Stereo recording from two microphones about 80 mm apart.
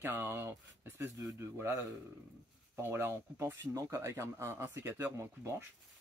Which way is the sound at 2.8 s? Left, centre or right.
Right.